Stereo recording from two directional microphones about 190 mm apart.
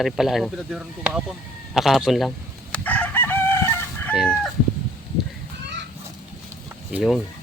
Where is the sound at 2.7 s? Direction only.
10° left (ahead or behind).